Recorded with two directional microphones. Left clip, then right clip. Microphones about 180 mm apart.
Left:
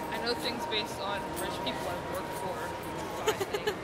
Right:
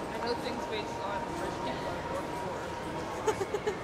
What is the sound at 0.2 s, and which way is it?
Speech, 5° left (ahead or behind).